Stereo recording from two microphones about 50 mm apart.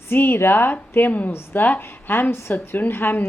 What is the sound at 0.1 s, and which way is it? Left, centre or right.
A woman's voice, left.